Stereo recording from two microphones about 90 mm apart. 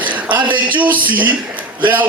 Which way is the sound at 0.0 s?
20° right (ahead or behind).